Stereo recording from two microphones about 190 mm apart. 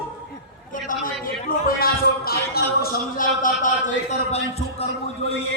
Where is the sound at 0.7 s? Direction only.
45° left (ahead or behind).